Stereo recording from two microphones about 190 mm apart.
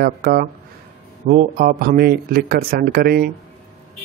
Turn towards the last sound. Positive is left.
turn(degrees=-55)  # may be behind; listen again after turning